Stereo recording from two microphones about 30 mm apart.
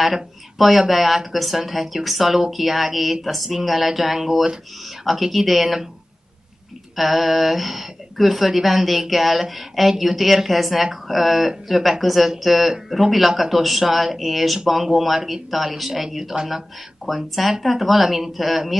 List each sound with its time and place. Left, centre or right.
0.0 s speech: centre
7.0 s speech: centre
15.1 s speech: centre